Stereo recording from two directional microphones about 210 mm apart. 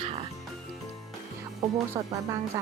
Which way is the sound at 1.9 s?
15° right (ahead or behind).